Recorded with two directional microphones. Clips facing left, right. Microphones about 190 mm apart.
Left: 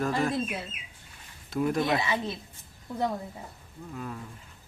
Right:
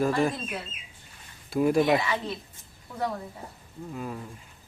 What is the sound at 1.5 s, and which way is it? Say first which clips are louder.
Speech: right 5 dB; 10° right (ahead or behind).